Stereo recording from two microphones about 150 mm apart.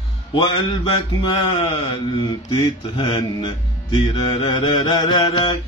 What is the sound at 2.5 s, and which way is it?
Speech, 30° left (ahead or behind).